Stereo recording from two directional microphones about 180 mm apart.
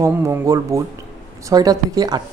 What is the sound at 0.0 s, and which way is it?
Speech, 15° right (ahead or behind).